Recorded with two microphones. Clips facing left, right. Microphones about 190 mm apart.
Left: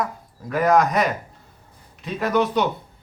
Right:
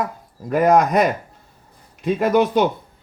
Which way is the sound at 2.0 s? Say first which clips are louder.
Right 5 dB; 50° right (ahead or behind).